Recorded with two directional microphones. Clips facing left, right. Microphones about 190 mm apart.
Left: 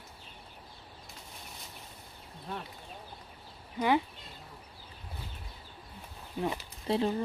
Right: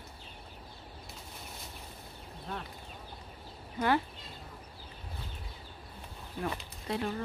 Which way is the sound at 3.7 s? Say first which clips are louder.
Left 1 dB; 15° left (ahead or behind).